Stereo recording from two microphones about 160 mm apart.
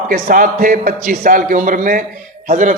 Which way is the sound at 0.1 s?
55° right (ahead or behind).